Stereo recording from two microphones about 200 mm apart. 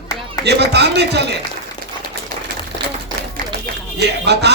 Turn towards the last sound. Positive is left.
turn(degrees=-55)  # may be behind; listen again after turning